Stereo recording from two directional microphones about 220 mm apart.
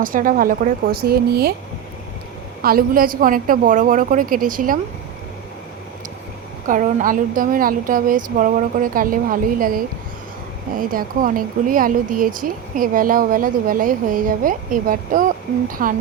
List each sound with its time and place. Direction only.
0.0 s speech: 40° right (ahead or behind)
2.6 s speech: 40° right (ahead or behind)
6.7 s speech: 35° right (ahead or behind)